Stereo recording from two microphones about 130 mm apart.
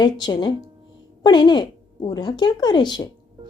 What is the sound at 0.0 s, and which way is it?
A woman's voice, 35° left (ahead or behind).